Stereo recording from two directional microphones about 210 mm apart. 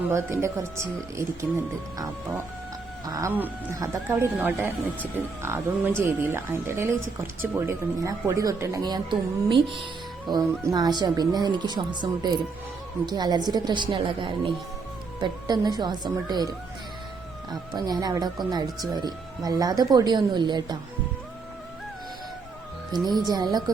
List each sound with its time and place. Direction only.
0.1 s speech: 10° right (ahead or behind)
3.1 s speech: 15° right (ahead or behind)
22.9 s speech: 20° right (ahead or behind)